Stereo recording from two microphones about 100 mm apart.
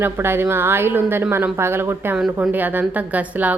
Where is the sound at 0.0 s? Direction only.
25° right (ahead or behind).